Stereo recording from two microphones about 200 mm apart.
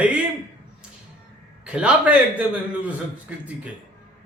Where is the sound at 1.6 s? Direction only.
5° right (ahead or behind).